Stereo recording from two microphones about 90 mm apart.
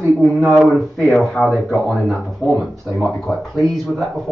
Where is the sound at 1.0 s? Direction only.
5° left (ahead or behind).